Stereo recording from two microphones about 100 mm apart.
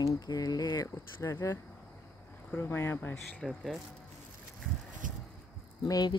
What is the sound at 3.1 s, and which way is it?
Speech, centre (ahead or behind).